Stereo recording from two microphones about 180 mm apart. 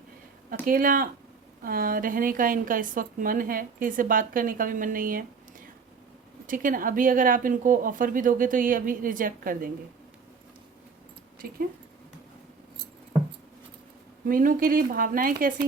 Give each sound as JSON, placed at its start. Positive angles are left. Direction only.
{"t": 0.6, "sound": "a woman's voice", "side_deg": -50}
{"t": 14.3, "sound": "a woman's voice", "side_deg": -50}